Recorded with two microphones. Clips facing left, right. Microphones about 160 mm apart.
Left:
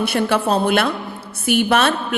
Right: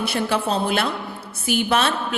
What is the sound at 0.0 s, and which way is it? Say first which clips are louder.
A woman's voice: left 4 dB; 60° left (ahead or behind).